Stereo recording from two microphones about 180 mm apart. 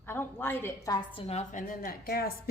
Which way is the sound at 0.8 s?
25° left (ahead or behind).